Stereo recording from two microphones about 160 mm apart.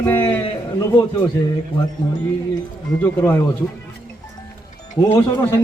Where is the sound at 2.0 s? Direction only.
25° left (ahead or behind).